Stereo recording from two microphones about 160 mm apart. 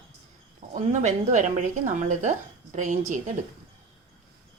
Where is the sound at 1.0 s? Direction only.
50° right (ahead or behind).